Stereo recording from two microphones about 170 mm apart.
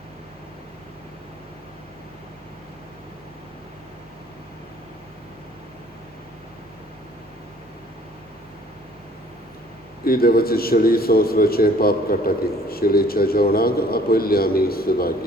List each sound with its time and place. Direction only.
10.0 s a man's voice: 60° left (ahead or behind)